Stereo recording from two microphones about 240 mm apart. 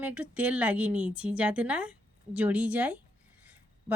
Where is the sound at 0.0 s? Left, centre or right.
Centre.